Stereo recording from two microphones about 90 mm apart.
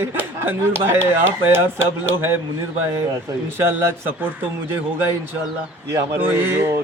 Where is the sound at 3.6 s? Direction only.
25° right (ahead or behind).